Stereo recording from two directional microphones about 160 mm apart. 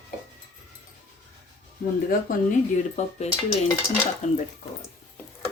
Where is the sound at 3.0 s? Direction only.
45° left (ahead or behind).